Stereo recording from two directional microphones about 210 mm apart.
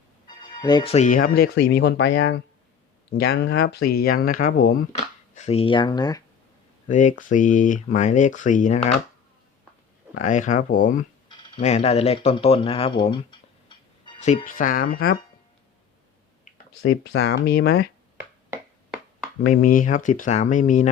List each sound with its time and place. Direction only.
0.3 s speech: 20° left (ahead or behind)
6.8 s speech: 35° left (ahead or behind)
10.2 s speech: 35° left (ahead or behind)
11.3 s a sound: 20° left (ahead or behind)
11.6 s speech: 30° left (ahead or behind)
14.2 s speech: 35° left (ahead or behind)
17.0 s speech: 50° left (ahead or behind)
18.5 s finger snapping: 5° right (ahead or behind)
19.4 s speech: 40° left (ahead or behind)